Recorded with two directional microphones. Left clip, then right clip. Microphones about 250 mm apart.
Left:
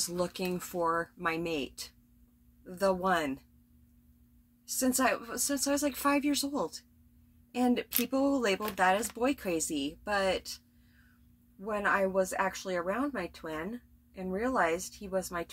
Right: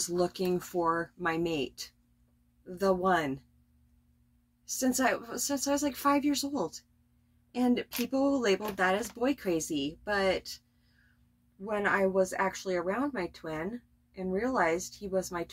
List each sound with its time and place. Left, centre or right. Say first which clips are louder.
0.1 s speech: right 4 dB; centre
4.6 s speech: even; centre
11.9 s speech: right 1 dB; centre